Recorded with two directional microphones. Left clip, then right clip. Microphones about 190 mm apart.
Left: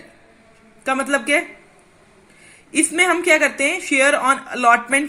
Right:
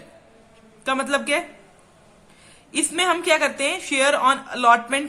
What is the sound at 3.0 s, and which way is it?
A woman's voice, 20° left (ahead or behind).